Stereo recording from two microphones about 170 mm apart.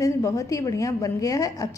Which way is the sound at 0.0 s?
15° left (ahead or behind).